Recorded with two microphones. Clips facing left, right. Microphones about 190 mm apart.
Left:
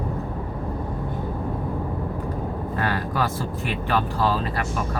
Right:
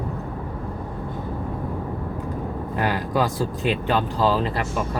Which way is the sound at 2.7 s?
15° right (ahead or behind).